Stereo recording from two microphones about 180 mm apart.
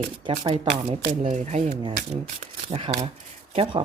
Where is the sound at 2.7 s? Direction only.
30° right (ahead or behind).